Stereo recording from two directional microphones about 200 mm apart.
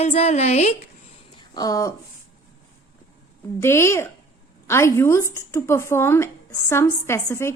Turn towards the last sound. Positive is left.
turn(degrees=15)  # may be behind; listen again after turning